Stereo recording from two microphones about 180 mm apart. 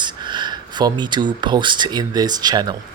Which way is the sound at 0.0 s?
25° right (ahead or behind).